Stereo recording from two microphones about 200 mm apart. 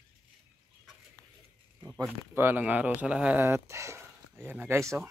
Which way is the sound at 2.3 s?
10° right (ahead or behind).